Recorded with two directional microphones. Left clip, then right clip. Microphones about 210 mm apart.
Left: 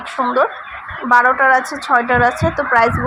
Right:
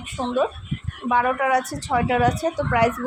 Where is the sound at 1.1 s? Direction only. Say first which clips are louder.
Left 8 dB; 5° left (ahead or behind).